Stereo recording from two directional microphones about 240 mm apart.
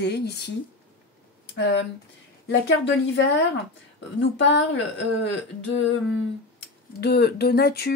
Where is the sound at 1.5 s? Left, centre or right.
Left.